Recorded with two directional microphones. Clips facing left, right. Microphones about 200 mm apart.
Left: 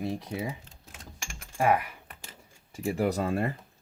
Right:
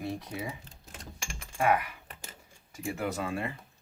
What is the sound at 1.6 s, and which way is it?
Speech, 30° left (ahead or behind).